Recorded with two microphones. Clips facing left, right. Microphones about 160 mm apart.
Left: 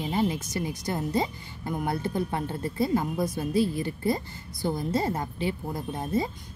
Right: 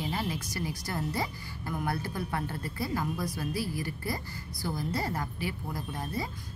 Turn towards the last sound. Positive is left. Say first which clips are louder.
# left 7 dB
turn(degrees=20)  # may be behind; listen again after turning